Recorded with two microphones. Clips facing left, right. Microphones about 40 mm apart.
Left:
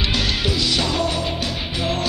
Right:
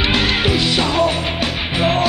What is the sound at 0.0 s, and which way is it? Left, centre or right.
Music, right.